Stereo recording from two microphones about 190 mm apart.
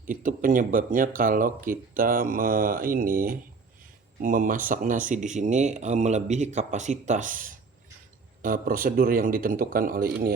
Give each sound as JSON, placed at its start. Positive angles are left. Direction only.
{"t": 0.0, "sound": "speech", "side_deg": -45}